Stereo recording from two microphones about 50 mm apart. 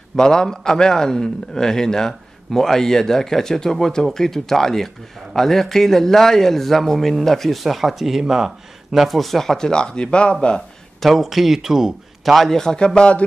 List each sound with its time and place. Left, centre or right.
0.1 s a man's voice: centre
11.0 s speech: centre
12.4 s a man's voice: centre